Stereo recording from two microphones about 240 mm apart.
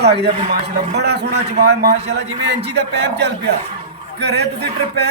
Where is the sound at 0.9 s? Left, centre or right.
Right.